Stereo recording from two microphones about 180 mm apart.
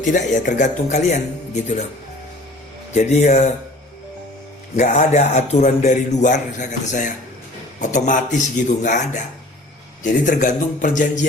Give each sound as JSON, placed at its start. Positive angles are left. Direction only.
{"t": 0.0, "sound": "speech", "side_deg": 45}
{"t": 2.9, "sound": "a man's voice", "side_deg": 40}
{"t": 4.8, "sound": "a man's voice", "side_deg": 40}